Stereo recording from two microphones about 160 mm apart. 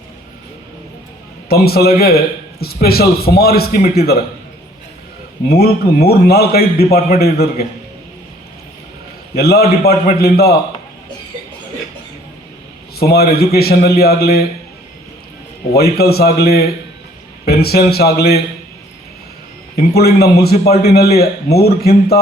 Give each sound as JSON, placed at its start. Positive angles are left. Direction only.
{"t": 1.5, "sound": "a man's voice", "side_deg": 75}
{"t": 5.5, "sound": "a man's voice", "side_deg": 75}
{"t": 9.3, "sound": "speech", "side_deg": 80}
{"t": 13.0, "sound": "speech", "side_deg": 80}
{"t": 15.7, "sound": "speech", "side_deg": 85}
{"t": 19.7, "sound": "speech", "side_deg": 75}